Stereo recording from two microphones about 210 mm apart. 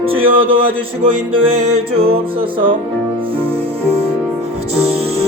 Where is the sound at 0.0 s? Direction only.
25° right (ahead or behind).